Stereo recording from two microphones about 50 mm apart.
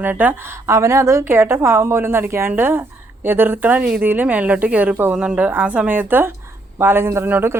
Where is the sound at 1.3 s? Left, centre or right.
Right.